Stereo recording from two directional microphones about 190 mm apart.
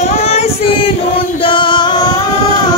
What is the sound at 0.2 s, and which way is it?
Female singing, 35° left (ahead or behind).